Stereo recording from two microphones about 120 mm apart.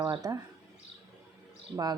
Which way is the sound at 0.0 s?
30° right (ahead or behind).